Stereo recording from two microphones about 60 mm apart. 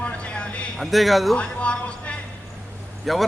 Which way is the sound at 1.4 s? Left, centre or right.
Centre.